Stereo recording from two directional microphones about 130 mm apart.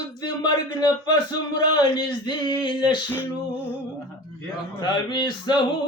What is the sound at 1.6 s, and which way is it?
Male singing, 35° left (ahead or behind).